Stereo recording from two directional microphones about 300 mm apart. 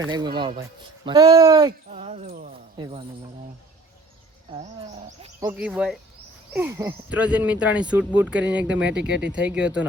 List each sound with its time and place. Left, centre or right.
0.0 s speech: centre
1.9 s a sound: right
2.7 s speech: centre
5.2 s speech: centre
5.5 s speech: centre